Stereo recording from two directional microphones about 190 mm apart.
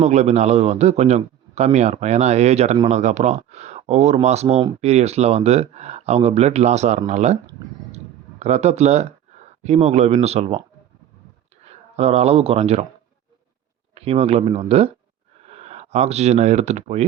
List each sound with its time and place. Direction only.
0.0 s a man's voice: 35° right (ahead or behind)
8.4 s a man's voice: 35° right (ahead or behind)
11.6 s speech: 35° right (ahead or behind)
13.9 s a man's voice: 30° right (ahead or behind)